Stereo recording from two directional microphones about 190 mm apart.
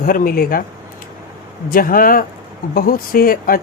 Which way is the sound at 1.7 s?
50° left (ahead or behind).